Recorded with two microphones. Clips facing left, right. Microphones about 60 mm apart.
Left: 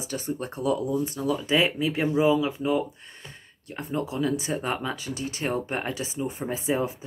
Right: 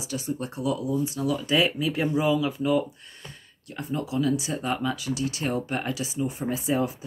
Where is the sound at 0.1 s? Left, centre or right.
Left.